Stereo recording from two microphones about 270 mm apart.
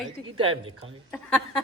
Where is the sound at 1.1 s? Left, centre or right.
Centre.